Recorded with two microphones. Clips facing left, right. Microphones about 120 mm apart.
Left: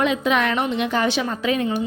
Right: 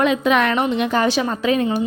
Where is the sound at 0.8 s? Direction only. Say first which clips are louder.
Right 3 dB; 40° right (ahead or behind).